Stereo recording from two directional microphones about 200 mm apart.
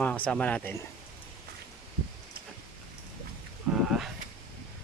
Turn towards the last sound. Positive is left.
turn(degrees=0)  # may be behind; listen again after turning